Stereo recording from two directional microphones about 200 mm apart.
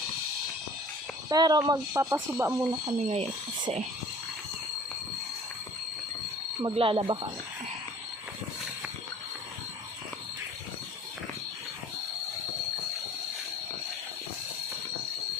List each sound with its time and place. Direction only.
1.3 s speech: 20° right (ahead or behind)
2.8 s speech: 30° right (ahead or behind)
6.6 s speech: 25° right (ahead or behind)